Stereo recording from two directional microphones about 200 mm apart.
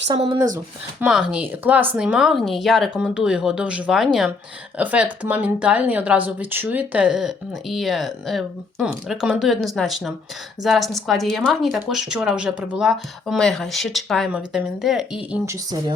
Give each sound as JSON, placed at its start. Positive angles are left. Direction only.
{"t": 0.1, "sound": "speech", "side_deg": -25}
{"t": 0.9, "sound": "speech", "side_deg": -5}
{"t": 15.4, "sound": "speech", "side_deg": -20}